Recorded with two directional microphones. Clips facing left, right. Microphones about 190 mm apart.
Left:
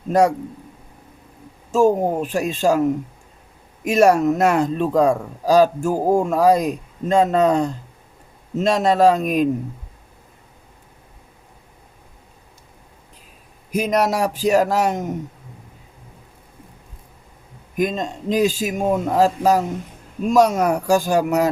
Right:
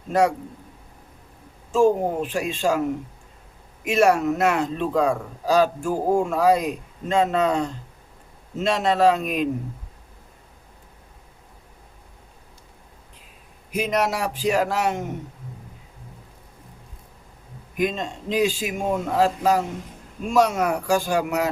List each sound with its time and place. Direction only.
0.1 s speech: 40° left (ahead or behind)
1.7 s speech: 40° left (ahead or behind)
3.8 s speech: 40° left (ahead or behind)
13.7 s speech: 40° left (ahead or behind)
17.7 s speech: 40° left (ahead or behind)